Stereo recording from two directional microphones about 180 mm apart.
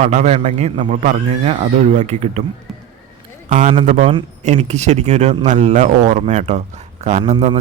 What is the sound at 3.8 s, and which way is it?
A man's voice, 35° right (ahead or behind).